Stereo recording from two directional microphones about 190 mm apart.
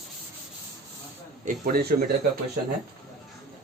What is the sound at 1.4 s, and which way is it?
Speech, 45° right (ahead or behind).